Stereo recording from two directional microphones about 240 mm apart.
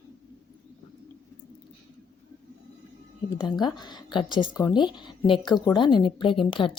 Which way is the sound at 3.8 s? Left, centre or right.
Centre.